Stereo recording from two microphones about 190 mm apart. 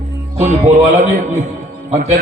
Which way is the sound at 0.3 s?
35° right (ahead or behind).